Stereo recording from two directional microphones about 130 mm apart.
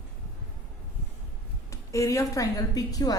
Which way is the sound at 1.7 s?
25° left (ahead or behind).